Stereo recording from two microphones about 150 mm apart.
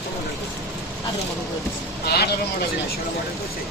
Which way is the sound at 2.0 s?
90° left.